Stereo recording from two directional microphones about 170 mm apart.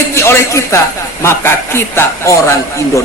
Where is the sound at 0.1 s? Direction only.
15° left (ahead or behind).